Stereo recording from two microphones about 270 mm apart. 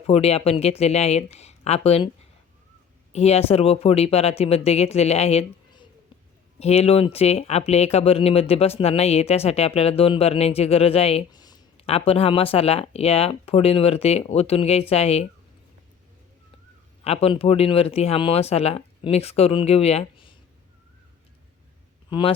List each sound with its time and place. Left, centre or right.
0.1 s speech: left
3.1 s speech: left
17.0 s speech: left
22.1 s speech: centre